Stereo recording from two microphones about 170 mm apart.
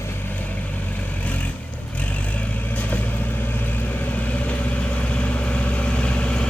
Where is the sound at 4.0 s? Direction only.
10° left (ahead or behind).